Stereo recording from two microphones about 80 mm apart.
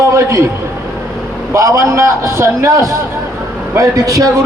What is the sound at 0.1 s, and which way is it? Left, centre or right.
Speech, right.